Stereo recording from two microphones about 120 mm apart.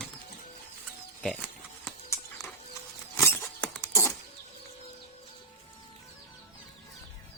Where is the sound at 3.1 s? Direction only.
20° left (ahead or behind).